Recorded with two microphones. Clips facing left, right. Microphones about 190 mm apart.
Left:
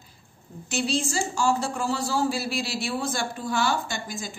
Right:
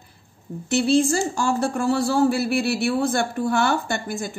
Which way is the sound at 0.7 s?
60° right (ahead or behind).